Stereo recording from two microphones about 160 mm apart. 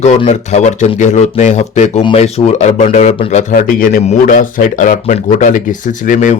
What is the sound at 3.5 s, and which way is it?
A man's voice, 60° left (ahead or behind).